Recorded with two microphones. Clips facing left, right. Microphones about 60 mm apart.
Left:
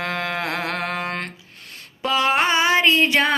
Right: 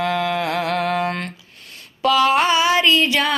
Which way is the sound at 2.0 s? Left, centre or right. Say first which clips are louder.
Right 4 dB; left.